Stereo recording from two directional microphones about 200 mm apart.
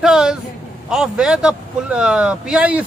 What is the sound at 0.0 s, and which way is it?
Speech, 5° right (ahead or behind).